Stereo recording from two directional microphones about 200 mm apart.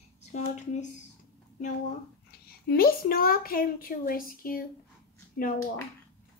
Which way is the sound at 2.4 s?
50° left (ahead or behind).